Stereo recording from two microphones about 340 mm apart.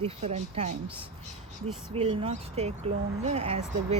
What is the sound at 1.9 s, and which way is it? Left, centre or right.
Speech, centre.